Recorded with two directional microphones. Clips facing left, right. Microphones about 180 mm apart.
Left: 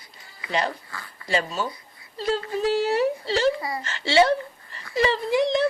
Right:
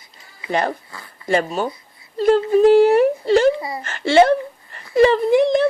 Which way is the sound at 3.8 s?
50° right (ahead or behind).